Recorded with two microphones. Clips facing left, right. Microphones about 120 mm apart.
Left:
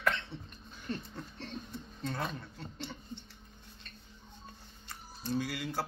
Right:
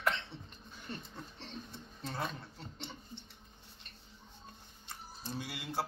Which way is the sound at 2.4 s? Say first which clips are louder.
Left 4 dB; 25° right (ahead or behind).